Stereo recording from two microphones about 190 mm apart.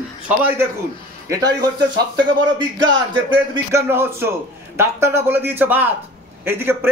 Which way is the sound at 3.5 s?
15° right (ahead or behind).